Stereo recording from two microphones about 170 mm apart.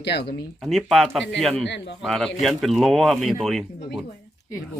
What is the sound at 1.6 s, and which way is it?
Speech, 90° left.